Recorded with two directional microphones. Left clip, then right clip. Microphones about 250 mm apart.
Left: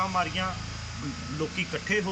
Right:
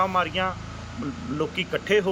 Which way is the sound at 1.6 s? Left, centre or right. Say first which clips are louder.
Right 6 dB; centre.